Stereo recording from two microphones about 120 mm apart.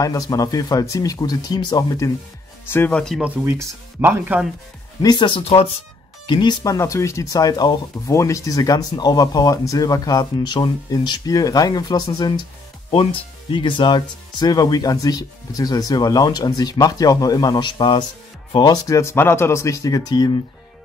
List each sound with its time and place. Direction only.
0.0 s speech: 30° left (ahead or behind)
2.7 s speech: 20° left (ahead or behind)
3.2 s speech: 15° right (ahead or behind)
5.0 s speech: 40° left (ahead or behind)
5.4 s speech: 55° left (ahead or behind)
6.2 s speech: 40° left (ahead or behind)
12.9 s speech: 50° left (ahead or behind)